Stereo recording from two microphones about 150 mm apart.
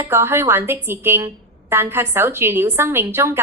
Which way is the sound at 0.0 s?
15° right (ahead or behind).